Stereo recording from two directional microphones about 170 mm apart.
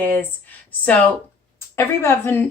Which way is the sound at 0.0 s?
10° left (ahead or behind).